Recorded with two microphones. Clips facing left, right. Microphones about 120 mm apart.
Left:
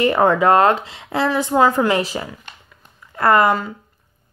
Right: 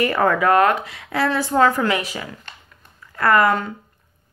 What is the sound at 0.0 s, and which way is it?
Speech, 25° left (ahead or behind).